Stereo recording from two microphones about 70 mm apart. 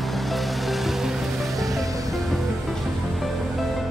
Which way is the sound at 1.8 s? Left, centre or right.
Right.